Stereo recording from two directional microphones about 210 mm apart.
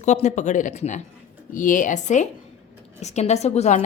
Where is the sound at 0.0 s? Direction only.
35° left (ahead or behind).